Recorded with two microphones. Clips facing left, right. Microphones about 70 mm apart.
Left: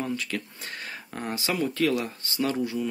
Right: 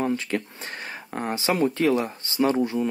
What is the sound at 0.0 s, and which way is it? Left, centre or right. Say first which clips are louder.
Speech: right 5 dB; right.